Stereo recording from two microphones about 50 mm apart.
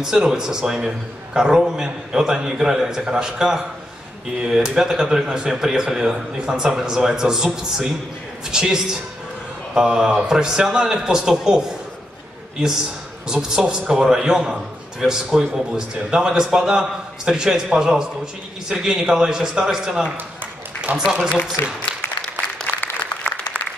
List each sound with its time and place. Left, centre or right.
0.0 s a man's voice: centre
13.3 s a man's voice: centre
20.9 s a man's voice: right
21.6 s speech: left
22.7 s applause: right